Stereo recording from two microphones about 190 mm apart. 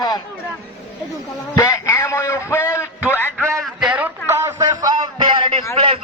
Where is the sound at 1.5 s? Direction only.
15° left (ahead or behind).